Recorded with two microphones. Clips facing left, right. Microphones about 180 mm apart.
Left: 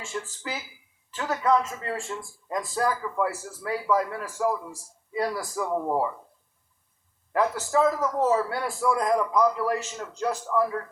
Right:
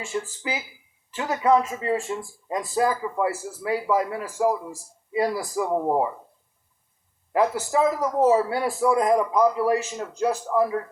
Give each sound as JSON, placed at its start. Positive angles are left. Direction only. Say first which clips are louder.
{"t": 0.0, "sound": "a man's voice", "louder": "right 5 dB", "side_deg": -15}
{"t": 7.3, "sound": "a man's voice", "louder": "right 2 dB", "side_deg": -15}